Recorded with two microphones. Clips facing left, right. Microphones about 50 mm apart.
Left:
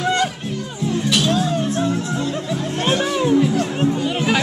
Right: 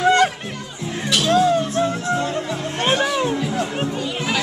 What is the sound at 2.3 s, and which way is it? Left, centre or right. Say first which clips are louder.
Music: left 1 dB; centre.